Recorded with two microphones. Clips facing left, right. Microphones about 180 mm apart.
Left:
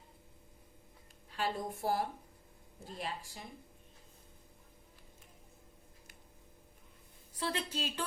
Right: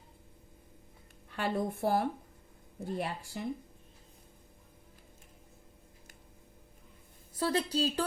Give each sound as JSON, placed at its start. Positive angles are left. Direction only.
{"t": 1.3, "sound": "speech", "side_deg": -60}
{"t": 7.3, "sound": "a woman's voice", "side_deg": -40}